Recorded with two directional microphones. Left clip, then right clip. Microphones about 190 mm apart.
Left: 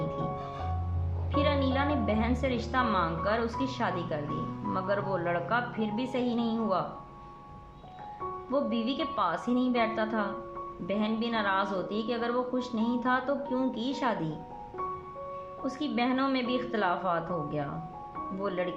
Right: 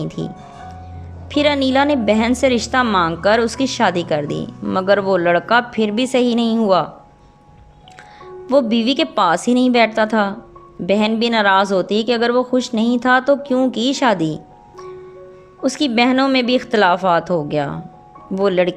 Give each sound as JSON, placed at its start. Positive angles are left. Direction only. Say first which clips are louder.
{"t": 0.2, "sound": "speech", "louder": "right 5 dB", "side_deg": -50}
{"t": 8.4, "sound": "speech", "louder": "right 16 dB", "side_deg": -50}
{"t": 15.6, "sound": "speech", "louder": "right 15 dB", "side_deg": -50}